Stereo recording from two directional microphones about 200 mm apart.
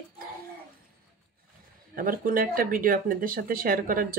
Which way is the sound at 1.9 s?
45° right (ahead or behind).